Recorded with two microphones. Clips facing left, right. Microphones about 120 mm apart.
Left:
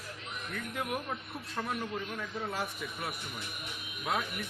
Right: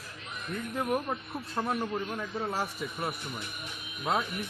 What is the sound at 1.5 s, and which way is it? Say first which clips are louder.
A man's voice: right 5 dB; 35° right (ahead or behind).